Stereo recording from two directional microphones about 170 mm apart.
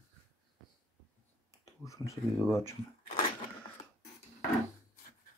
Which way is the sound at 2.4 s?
15° left (ahead or behind).